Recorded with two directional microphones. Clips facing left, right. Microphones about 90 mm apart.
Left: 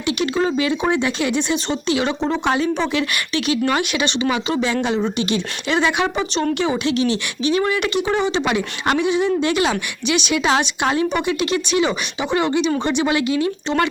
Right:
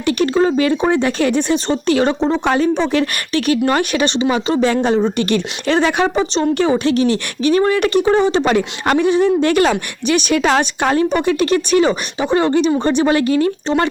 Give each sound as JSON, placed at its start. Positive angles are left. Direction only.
{"t": 0.0, "sound": "speech", "side_deg": -45}